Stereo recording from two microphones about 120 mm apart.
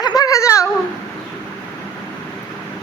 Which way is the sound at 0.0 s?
30° left (ahead or behind).